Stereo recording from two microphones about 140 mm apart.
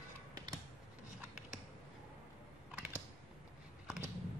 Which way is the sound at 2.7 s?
10° right (ahead or behind).